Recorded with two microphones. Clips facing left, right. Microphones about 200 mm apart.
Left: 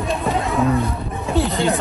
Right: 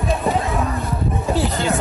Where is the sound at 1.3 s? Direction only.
Centre (ahead or behind).